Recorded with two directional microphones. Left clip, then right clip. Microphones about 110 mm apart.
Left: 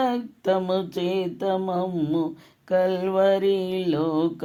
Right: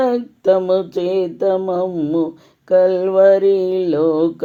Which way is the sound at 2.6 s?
40° right (ahead or behind).